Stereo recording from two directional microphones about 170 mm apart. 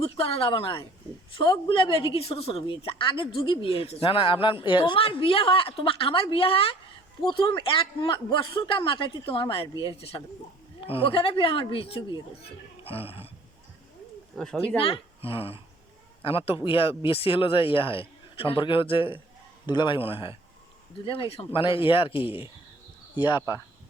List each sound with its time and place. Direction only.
0.0 s a woman's voice: 35° left (ahead or behind)
12.8 s roaring cats: 35° left (ahead or behind)
14.3 s speech: 5° left (ahead or behind)
14.8 s a woman's voice: 35° left (ahead or behind)